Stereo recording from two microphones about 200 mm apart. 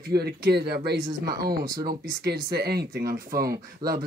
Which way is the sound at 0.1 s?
55° right (ahead or behind).